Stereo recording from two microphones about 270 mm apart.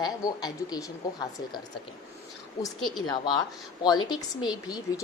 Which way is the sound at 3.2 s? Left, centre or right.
Centre.